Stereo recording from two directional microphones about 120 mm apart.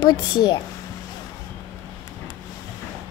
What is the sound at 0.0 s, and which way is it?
Speech, 35° left (ahead or behind).